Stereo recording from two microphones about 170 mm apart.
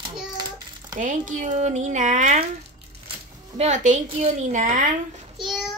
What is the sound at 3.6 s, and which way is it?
Speech, 40° right (ahead or behind).